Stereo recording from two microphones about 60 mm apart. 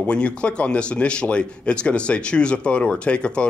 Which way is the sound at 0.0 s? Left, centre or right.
Centre.